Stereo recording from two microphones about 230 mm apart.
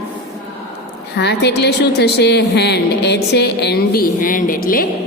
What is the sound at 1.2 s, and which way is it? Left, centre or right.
Speech, left.